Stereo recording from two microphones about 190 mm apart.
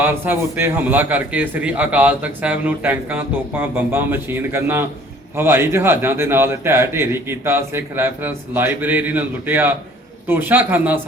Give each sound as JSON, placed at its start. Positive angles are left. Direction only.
{"t": 0.0, "sound": "a man's voice", "side_deg": -10}